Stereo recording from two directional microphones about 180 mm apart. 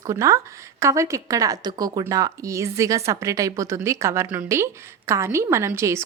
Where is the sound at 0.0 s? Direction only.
20° right (ahead or behind).